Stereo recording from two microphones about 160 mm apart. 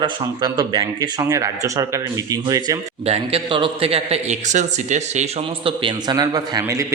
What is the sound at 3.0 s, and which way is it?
A man's voice, 40° right (ahead or behind).